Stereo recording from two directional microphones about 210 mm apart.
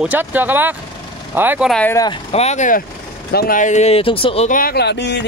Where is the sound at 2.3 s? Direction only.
30° left (ahead or behind).